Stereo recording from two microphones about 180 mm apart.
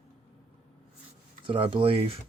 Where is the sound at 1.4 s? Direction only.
30° right (ahead or behind).